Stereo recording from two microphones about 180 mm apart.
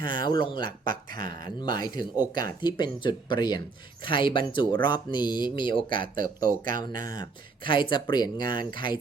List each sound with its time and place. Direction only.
0.0 s speech: 25° left (ahead or behind)